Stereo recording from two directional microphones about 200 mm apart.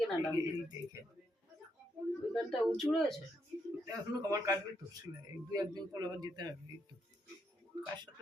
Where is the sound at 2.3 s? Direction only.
Centre (ahead or behind).